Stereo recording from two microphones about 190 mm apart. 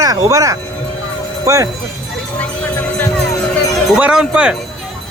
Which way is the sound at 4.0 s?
5° right (ahead or behind).